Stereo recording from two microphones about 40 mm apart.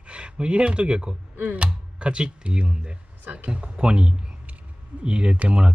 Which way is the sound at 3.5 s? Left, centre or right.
Right.